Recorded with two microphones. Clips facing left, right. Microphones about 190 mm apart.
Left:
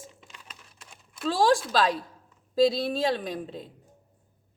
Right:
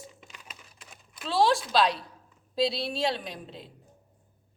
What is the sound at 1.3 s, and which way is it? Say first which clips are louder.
A woman's voice: left 1 dB; 45° left (ahead or behind).